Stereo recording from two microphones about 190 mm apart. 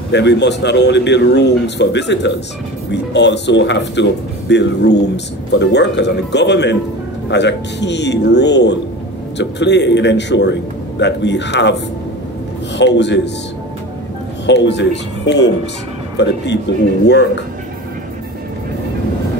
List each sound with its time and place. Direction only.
0.1 s speech: 65° left (ahead or behind)
14.4 s speech: 65° left (ahead or behind)